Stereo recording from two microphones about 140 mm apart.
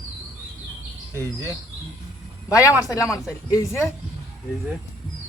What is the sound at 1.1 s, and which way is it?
Speech, 20° right (ahead or behind).